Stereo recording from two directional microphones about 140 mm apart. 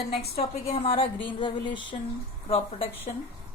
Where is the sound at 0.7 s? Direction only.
45° left (ahead or behind).